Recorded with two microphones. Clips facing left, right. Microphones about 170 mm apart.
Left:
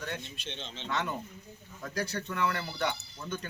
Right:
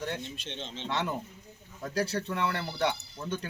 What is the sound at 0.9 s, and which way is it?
A man's voice, 30° right (ahead or behind).